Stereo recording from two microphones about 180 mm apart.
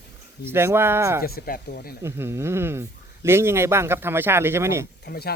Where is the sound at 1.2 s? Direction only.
55° left (ahead or behind).